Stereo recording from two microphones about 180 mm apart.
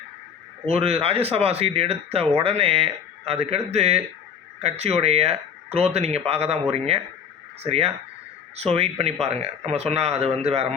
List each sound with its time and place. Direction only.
0.6 s speech: 35° right (ahead or behind)